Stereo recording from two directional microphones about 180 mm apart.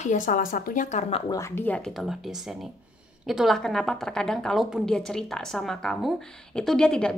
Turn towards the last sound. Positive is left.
turn(degrees=5)  # may be behind; listen again after turning